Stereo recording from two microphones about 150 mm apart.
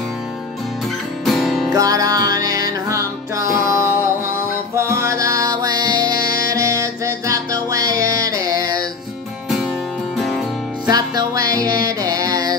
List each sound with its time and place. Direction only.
1.2 s music: centre (ahead or behind)
1.7 s music: 25° right (ahead or behind)
10.1 s music: centre (ahead or behind)
11.1 s music: 25° right (ahead or behind)